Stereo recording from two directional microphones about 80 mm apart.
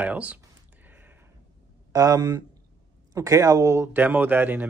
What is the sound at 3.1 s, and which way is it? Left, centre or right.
Speech, right.